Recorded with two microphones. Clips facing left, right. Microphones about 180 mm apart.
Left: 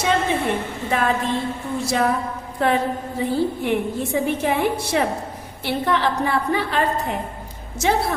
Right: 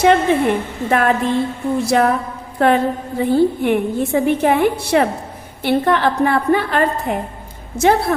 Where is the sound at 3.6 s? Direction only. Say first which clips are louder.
Right 5 dB; 60° right (ahead or behind).